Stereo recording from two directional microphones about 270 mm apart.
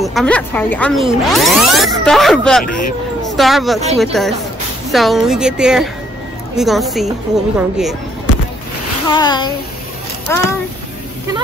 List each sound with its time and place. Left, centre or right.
0.0 s speech: centre
9.1 s a child's voice: centre